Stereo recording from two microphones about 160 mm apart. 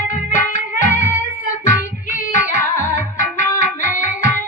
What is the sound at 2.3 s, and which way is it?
Music, 55° left (ahead or behind).